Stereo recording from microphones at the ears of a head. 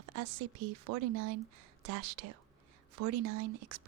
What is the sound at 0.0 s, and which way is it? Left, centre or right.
Speech, right.